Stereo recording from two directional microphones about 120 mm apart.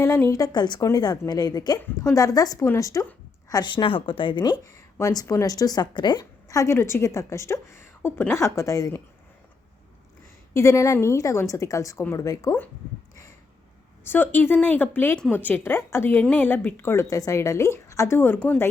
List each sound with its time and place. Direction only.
0.0 s speech: 25° left (ahead or behind)
3.5 s speech: 40° left (ahead or behind)
4.6 s speech: 25° left (ahead or behind)
10.5 s speech: 25° left (ahead or behind)
14.0 s speech: 20° left (ahead or behind)